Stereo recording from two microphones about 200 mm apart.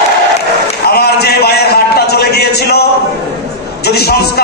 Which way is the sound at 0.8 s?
55° left (ahead or behind).